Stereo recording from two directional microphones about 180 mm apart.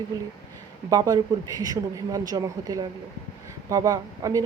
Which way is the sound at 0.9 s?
20° right (ahead or behind).